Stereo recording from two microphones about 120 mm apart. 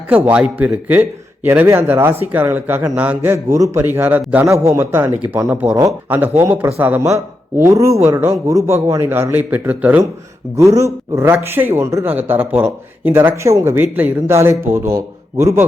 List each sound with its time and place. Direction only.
0.3 s a man's voice: 10° right (ahead or behind)
4.4 s a man's voice: 25° right (ahead or behind)
7.6 s a man's voice: 25° right (ahead or behind)
10.6 s a man's voice: 25° right (ahead or behind)